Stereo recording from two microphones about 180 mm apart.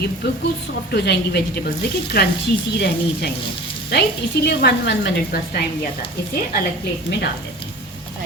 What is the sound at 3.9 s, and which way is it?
A woman's voice, 65° left (ahead or behind).